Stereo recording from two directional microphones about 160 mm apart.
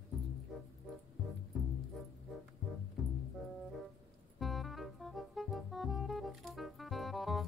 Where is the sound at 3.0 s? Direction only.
Centre (ahead or behind).